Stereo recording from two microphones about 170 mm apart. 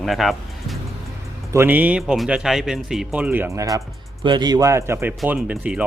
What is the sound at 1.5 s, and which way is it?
Speech, 10° right (ahead or behind).